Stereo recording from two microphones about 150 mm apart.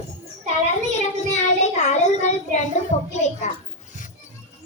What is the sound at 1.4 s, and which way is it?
Child singing, 50° left (ahead or behind).